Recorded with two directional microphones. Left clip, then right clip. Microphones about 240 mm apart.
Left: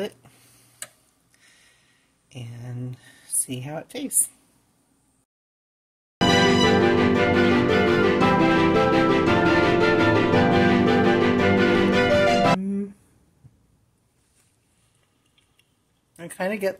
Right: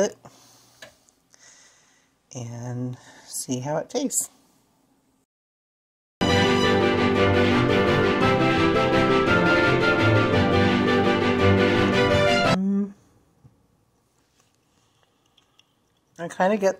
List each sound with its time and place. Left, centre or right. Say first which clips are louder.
2.3 s a woman's voice: right 5 dB; right
3.7 s a woman's voice: right 8 dB; right
6.1 s music: left 2 dB; centre
16.2 s speech: right 5 dB; centre